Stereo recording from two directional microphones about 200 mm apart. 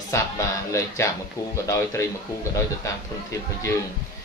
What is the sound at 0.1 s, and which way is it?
Speech, 15° left (ahead or behind).